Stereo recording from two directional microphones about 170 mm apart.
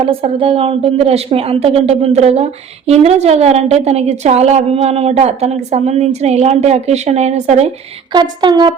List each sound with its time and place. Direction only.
0.0 s a woman's voice: 35° right (ahead or behind)
8.1 s speech: 25° right (ahead or behind)